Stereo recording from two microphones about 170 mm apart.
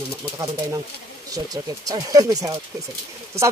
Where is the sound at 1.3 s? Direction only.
20° right (ahead or behind).